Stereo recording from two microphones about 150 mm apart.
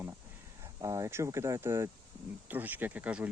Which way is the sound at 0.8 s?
20° right (ahead or behind).